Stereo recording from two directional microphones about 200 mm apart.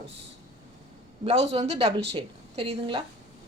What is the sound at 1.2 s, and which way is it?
A woman's voice, 30° right (ahead or behind).